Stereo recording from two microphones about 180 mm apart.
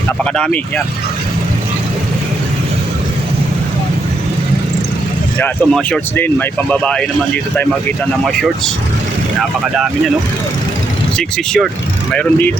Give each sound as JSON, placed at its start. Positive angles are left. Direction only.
{"t": 0.3, "sound": "speech", "side_deg": 5}
{"t": 5.4, "sound": "speech", "side_deg": 5}
{"t": 8.2, "sound": "speech", "side_deg": 0}
{"t": 11.2, "sound": "speech", "side_deg": 5}